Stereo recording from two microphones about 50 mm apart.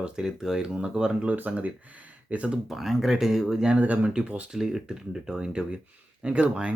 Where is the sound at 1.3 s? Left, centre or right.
Right.